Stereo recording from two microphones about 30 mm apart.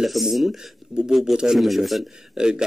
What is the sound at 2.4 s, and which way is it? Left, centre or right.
Speech, right.